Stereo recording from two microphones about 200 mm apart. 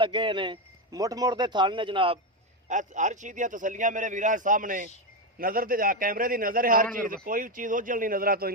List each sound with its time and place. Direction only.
0.0 s speech: 25° right (ahead or behind)
2.6 s a man's voice: 40° right (ahead or behind)